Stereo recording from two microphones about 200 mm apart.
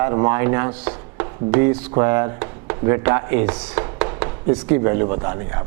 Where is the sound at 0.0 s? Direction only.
20° right (ahead or behind).